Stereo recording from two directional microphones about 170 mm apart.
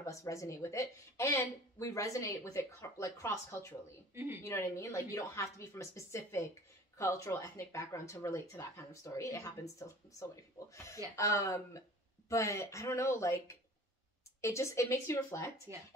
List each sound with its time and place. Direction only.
0.0 s speech: 15° left (ahead or behind)
4.1 s speech: 15° right (ahead or behind)
4.4 s speech: 15° left (ahead or behind)